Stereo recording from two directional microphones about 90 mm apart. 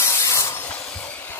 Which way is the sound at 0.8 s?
30° left (ahead or behind).